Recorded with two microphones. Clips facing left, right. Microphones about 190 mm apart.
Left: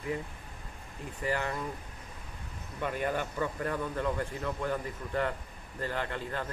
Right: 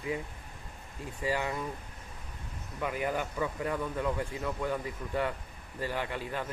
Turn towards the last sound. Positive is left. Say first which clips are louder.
# even
turn(degrees=-10)  # may be behind; listen again after turning